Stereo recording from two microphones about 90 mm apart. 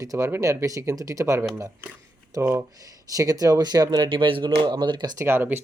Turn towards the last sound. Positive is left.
turn(degrees=-25)  # may be behind; listen again after turning